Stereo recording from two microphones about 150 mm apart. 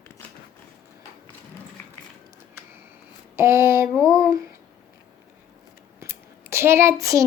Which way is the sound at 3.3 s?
20° right (ahead or behind).